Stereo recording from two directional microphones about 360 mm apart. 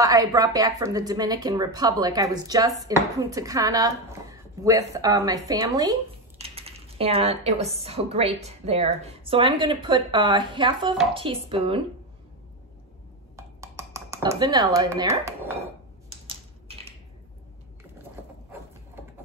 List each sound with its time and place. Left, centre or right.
0.0 s speech: centre
13.4 s a sound: centre
16.3 s typing: centre